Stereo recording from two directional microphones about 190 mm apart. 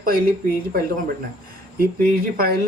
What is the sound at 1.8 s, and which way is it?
Speech, 50° right (ahead or behind).